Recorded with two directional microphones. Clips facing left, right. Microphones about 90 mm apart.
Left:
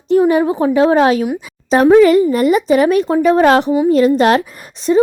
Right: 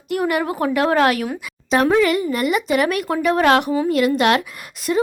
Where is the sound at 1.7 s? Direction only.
30° left (ahead or behind).